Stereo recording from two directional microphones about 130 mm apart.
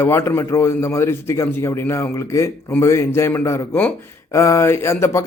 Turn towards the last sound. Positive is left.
turn(degrees=20)  # may be behind; listen again after turning